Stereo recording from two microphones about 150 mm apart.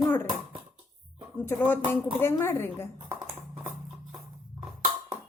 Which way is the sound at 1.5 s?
15° left (ahead or behind).